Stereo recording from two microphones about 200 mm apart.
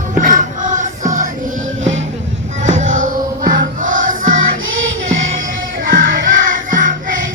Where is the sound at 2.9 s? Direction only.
40° right (ahead or behind).